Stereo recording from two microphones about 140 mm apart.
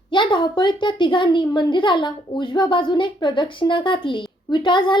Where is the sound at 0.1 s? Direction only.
35° left (ahead or behind).